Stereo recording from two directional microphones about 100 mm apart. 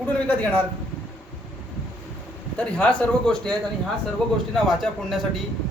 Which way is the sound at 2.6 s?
15° left (ahead or behind).